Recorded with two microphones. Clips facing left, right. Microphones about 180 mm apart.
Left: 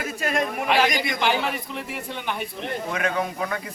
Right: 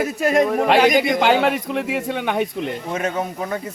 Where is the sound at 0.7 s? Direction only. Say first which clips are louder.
Right 5 dB; 80° right.